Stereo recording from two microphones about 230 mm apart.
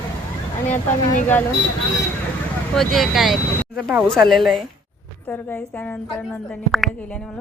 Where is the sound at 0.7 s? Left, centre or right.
Left.